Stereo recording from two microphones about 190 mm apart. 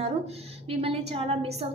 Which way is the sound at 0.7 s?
30° right (ahead or behind).